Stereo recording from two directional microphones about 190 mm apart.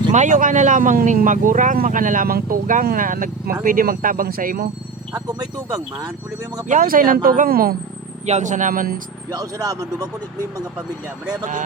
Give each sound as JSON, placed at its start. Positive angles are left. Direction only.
{"t": 0.1, "sound": "speech", "side_deg": -40}
{"t": 5.4, "sound": "speech", "side_deg": -20}
{"t": 6.7, "sound": "speech", "side_deg": -45}
{"t": 8.3, "sound": "speech", "side_deg": -40}
{"t": 9.3, "sound": "speech", "side_deg": -20}